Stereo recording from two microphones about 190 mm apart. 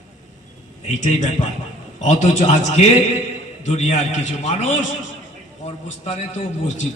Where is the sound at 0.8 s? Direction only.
40° left (ahead or behind).